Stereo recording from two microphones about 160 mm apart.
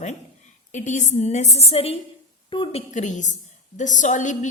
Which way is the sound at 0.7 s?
50° left (ahead or behind).